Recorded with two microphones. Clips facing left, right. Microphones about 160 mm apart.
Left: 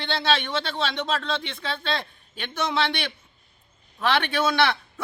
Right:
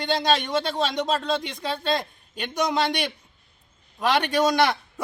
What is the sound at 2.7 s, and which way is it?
Speech, 40° right (ahead or behind).